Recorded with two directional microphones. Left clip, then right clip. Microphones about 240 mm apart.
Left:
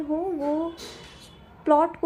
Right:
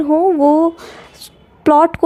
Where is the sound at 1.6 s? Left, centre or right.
Right.